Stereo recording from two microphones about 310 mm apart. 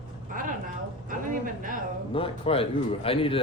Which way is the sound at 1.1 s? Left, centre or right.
Right.